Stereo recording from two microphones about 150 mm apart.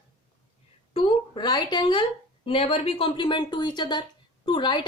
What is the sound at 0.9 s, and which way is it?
A woman's voice, 35° left (ahead or behind).